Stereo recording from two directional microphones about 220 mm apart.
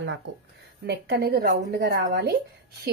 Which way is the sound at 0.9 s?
45° right (ahead or behind).